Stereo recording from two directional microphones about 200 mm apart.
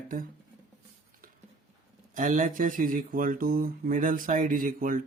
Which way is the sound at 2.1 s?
40° right (ahead or behind).